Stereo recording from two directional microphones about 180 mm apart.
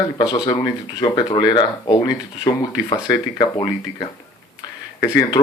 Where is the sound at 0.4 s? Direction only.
25° left (ahead or behind).